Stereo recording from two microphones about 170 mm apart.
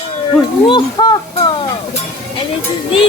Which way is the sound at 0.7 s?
25° left (ahead or behind).